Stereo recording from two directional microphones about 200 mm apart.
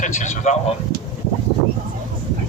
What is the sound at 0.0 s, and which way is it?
Speech, 35° left (ahead or behind).